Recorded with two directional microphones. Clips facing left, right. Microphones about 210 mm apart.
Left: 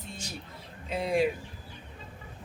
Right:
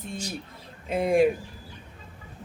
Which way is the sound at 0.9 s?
50° right (ahead or behind).